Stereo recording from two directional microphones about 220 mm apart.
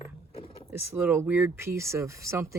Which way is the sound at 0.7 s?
10° right (ahead or behind).